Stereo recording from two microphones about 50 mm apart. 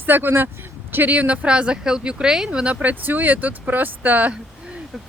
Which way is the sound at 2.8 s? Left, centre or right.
Right.